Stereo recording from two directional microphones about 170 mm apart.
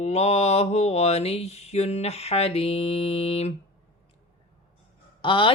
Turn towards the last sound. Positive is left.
turn(degrees=30)  # may be behind; listen again after turning